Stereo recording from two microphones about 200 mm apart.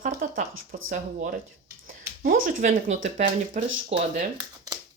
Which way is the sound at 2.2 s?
45° right (ahead or behind).